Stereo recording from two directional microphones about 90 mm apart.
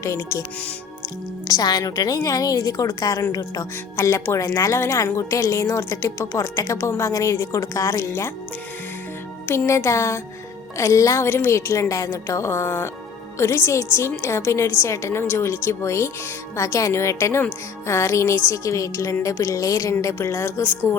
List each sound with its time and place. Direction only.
0.0 s a woman's voice: 35° left (ahead or behind)
1.5 s a woman's voice: 45° left (ahead or behind)
3.9 s a woman's voice: 30° left (ahead or behind)
9.5 s a woman's voice: 30° left (ahead or behind)